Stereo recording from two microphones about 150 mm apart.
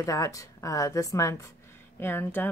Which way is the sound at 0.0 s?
20° left (ahead or behind).